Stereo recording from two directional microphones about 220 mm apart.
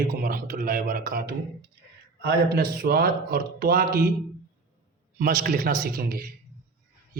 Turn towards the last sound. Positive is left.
turn(degrees=-45)  # may be behind; listen again after turning